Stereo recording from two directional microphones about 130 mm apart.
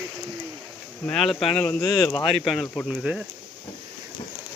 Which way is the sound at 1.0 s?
5° left (ahead or behind).